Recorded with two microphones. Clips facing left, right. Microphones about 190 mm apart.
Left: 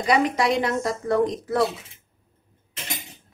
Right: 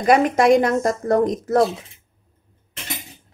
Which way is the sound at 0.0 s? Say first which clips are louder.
Right 5 dB; 50° right (ahead or behind).